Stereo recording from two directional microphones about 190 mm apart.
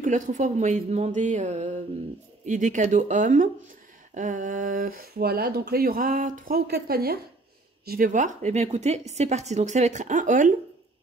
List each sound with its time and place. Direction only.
0.0 s speech: 40° right (ahead or behind)